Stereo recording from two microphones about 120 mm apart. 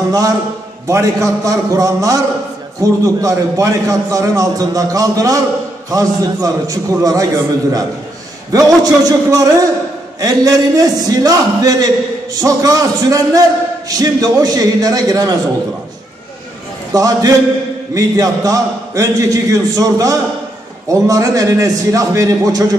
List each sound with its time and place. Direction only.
0.8 s a man's voice: 25° right (ahead or behind)
8.5 s a man's voice: 30° right (ahead or behind)
16.9 s a man's voice: 30° right (ahead or behind)